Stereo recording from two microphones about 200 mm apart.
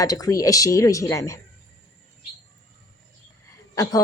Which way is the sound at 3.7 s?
15° left (ahead or behind).